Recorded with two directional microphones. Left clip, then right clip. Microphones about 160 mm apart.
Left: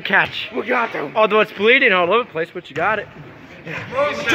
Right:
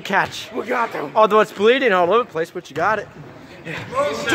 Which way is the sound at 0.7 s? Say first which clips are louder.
Left 1 dB; 40° left (ahead or behind).